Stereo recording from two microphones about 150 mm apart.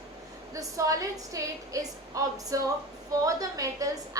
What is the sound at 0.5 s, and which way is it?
A woman's voice, 20° right (ahead or behind).